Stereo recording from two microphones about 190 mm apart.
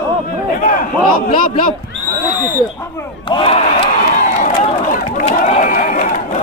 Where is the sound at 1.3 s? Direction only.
45° left (ahead or behind).